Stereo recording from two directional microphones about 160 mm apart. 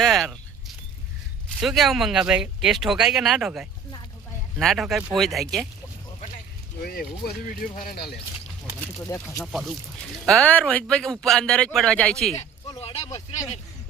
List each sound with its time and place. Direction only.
0.0 s a sound: centre (ahead or behind)
1.6 s speech: centre (ahead or behind)
6.8 s speech: 65° left (ahead or behind)
9.0 s speech: 20° left (ahead or behind)
9.4 s speech: centre (ahead or behind)
12.3 s a sound: 20° left (ahead or behind)
13.1 s speech: 40° left (ahead or behind)